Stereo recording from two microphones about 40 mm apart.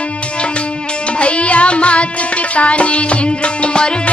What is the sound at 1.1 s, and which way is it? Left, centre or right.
Music, left.